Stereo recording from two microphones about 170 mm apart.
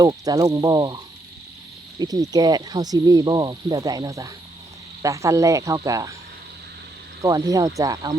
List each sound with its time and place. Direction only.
0.0 s speech: 20° right (ahead or behind)
7.2 s speech: 20° right (ahead or behind)